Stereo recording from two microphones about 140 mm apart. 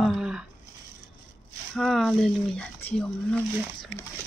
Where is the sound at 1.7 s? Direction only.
Centre (ahead or behind).